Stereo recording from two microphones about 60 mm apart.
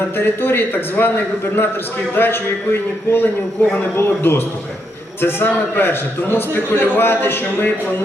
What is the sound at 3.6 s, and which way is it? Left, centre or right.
A man's voice, left.